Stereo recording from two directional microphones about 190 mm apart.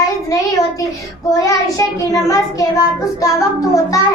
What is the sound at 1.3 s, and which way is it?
Child singing, 15° left (ahead or behind).